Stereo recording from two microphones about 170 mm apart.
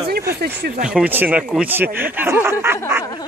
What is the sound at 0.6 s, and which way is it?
Speech, 65° right (ahead or behind).